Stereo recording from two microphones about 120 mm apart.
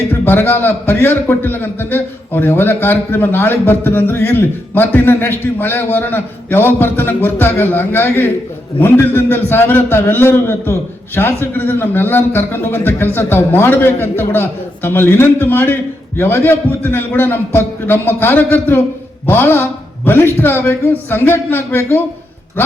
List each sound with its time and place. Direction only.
0.1 s a man's voice: 15° left (ahead or behind)